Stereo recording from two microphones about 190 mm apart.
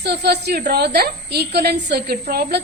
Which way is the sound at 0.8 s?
55° right (ahead or behind).